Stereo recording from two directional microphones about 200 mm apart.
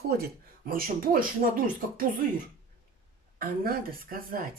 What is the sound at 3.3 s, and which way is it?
Speech, 45° right (ahead or behind).